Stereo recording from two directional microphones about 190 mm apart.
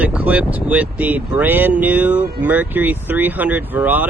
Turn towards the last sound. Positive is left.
turn(degrees=-10)  # may be behind; listen again after turning